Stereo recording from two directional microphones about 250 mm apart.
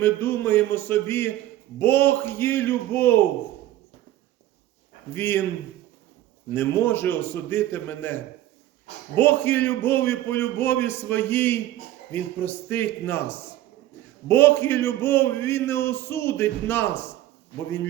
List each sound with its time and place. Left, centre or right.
0.0 s a man's voice: centre
5.1 s a man's voice: centre
6.5 s a man's voice: centre